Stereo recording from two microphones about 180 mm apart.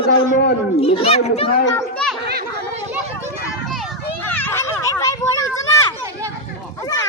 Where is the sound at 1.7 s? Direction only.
5° left (ahead or behind).